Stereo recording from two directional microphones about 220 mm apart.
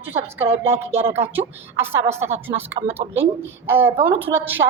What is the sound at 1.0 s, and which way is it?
Speech, 30° right (ahead or behind).